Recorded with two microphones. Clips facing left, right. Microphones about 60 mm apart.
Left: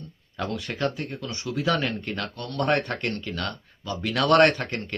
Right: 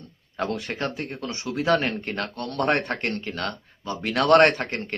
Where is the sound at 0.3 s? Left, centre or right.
Right.